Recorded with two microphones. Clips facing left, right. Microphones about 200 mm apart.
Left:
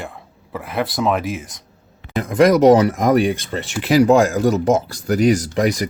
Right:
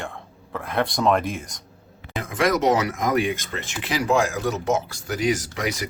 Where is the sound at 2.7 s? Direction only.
35° left (ahead or behind).